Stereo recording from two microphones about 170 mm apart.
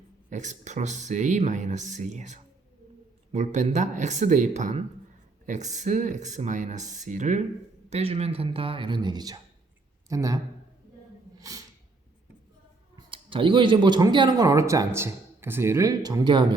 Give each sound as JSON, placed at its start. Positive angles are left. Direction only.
{"t": 0.3, "sound": "a man's voice", "side_deg": -45}
{"t": 11.3, "sound": "sneeze", "side_deg": -20}
{"t": 13.0, "sound": "speech", "side_deg": -30}